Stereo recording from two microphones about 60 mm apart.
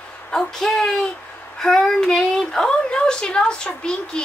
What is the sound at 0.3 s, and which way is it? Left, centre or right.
A woman's voice, centre.